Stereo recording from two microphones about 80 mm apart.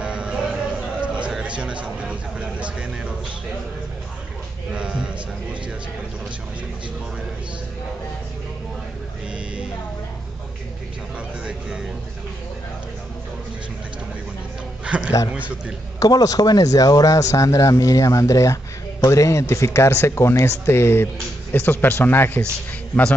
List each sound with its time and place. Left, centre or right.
0.0 s a sound: centre
1.6 s speech: centre
4.7 s speech: centre
14.9 s a man's voice: centre
16.0 s speech: left